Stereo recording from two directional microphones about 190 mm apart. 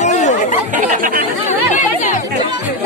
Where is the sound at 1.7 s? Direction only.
40° left (ahead or behind).